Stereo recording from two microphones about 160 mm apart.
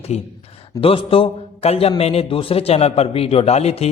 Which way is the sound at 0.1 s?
40° left (ahead or behind).